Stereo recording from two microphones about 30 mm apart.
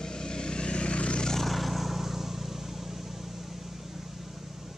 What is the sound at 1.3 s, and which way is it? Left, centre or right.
Vehicle, centre.